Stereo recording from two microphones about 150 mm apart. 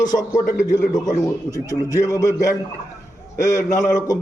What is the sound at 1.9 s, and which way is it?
Speech, 20° left (ahead or behind).